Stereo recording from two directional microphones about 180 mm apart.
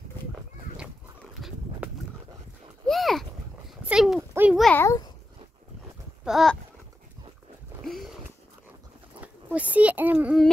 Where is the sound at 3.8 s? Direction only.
5° right (ahead or behind).